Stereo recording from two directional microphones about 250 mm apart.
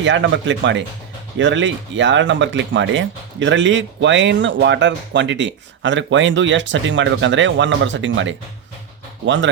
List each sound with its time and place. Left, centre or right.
0.0 s speech: right